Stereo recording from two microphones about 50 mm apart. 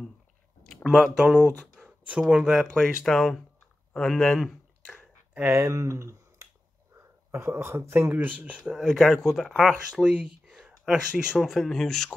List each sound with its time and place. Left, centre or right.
0.8 s speech: centre
3.1 s speech: centre
4.4 s a sound: centre
5.5 s speech: right
8.2 s speech: right
8.6 s speech: centre
10.6 s a sound: centre
11.3 s speech: centre